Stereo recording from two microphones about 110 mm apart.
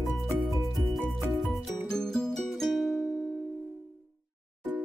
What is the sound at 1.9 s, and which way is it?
Music, 5° left (ahead or behind).